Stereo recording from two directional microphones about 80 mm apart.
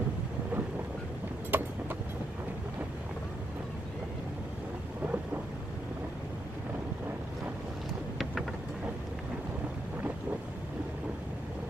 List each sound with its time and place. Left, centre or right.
1.5 s vehicle: right
5.0 s thunder: centre